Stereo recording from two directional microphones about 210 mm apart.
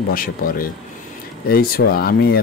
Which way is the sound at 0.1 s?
45° left (ahead or behind).